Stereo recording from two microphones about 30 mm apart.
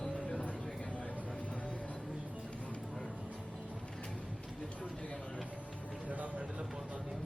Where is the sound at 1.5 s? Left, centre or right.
Left.